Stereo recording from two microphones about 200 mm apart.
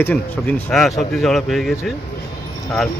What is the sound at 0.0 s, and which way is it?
Speech, 10° left (ahead or behind).